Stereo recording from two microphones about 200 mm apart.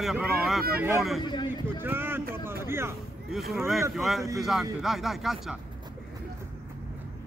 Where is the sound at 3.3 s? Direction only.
Centre (ahead or behind).